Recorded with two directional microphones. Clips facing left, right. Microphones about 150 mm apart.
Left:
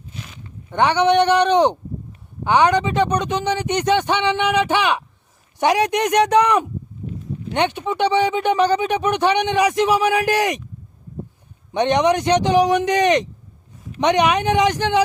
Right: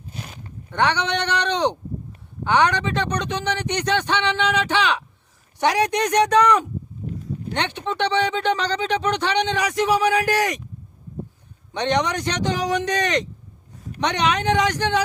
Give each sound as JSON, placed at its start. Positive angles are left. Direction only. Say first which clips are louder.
{"t": 0.1, "sound": "a sound", "louder": "right 1 dB", "side_deg": -40}
{"t": 0.7, "sound": "a man's voice", "louder": "left 6 dB", "side_deg": 15}
{"t": 11.7, "sound": "a man's voice", "louder": "left 5 dB", "side_deg": 15}